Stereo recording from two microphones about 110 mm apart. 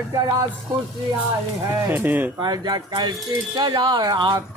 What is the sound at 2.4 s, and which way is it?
Speech, 40° right (ahead or behind).